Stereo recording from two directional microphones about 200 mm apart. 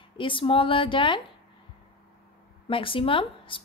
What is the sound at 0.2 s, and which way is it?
A woman's voice, 25° left (ahead or behind).